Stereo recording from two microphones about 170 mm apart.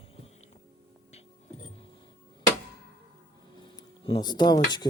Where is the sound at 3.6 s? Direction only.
25° left (ahead or behind).